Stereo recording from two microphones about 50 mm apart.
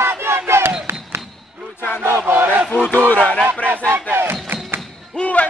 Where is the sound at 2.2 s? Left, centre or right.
Right.